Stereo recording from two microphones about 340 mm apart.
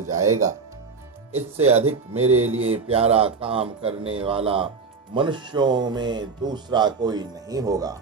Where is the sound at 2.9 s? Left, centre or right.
Centre.